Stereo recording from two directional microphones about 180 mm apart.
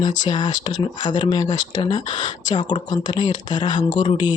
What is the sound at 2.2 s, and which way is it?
Speech, 45° left (ahead or behind).